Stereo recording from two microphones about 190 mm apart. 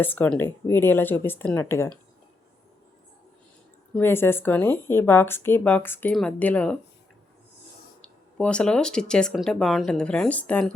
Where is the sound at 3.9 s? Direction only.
10° left (ahead or behind).